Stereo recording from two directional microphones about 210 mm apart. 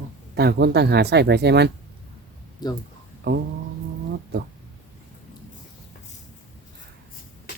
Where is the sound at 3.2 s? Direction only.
50° right (ahead or behind).